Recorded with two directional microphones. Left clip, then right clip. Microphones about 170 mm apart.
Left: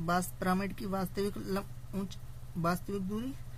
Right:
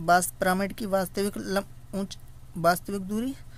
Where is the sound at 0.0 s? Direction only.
60° right (ahead or behind).